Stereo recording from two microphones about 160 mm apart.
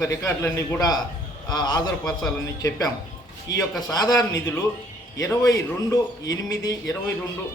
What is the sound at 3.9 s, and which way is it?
Speech, 25° left (ahead or behind).